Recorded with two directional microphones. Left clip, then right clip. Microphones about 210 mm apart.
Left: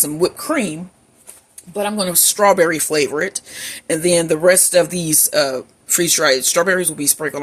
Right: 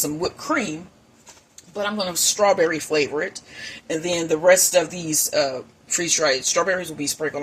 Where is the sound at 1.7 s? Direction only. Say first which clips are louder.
Left 5 dB; 60° left (ahead or behind).